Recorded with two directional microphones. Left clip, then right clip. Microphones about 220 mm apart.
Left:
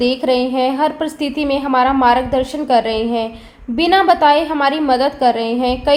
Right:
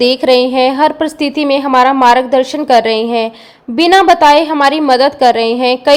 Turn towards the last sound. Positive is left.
turn(degrees=-25)  # may be behind; listen again after turning